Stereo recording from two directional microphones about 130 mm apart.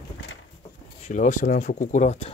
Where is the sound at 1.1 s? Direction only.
70° left (ahead or behind).